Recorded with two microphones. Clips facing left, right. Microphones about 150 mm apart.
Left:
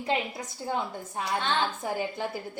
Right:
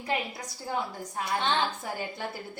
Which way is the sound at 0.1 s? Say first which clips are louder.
Left 2 dB; 20° left (ahead or behind).